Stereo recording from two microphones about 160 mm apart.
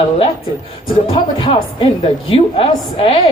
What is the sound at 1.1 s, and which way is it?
A woman's voice, 35° left (ahead or behind).